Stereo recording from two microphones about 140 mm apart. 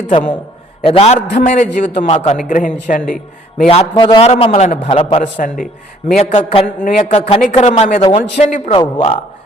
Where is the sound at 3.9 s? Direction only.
30° left (ahead or behind).